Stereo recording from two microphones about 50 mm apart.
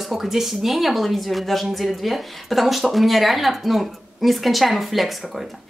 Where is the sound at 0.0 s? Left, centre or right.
Centre.